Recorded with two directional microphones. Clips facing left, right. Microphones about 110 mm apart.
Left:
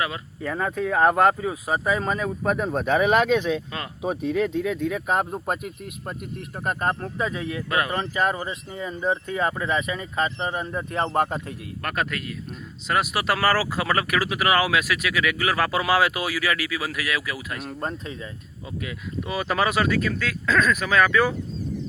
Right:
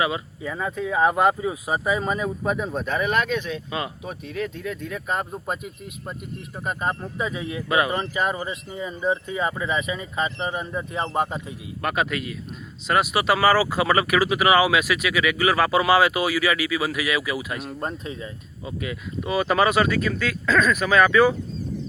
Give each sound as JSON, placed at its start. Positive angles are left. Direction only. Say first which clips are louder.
{"t": 0.0, "sound": "speech", "louder": "right 3 dB", "side_deg": -10}
{"t": 0.5, "sound": "speech", "louder": "left 1 dB", "side_deg": 0}
{"t": 2.4, "sound": "speech", "louder": "left 1 dB", "side_deg": 0}
{"t": 2.7, "sound": "speech", "louder": "left 7 dB", "side_deg": 90}
{"t": 3.7, "sound": "speech", "louder": "right 5 dB", "side_deg": -10}
{"t": 4.4, "sound": "speech", "louder": "left 6 dB", "side_deg": 90}
{"t": 4.9, "sound": "speech", "louder": "left 4 dB", "side_deg": 10}
{"t": 18.6, "sound": "speech", "louder": "right 2 dB", "side_deg": 0}